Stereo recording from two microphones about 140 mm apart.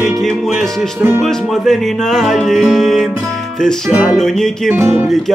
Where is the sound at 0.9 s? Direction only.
15° right (ahead or behind).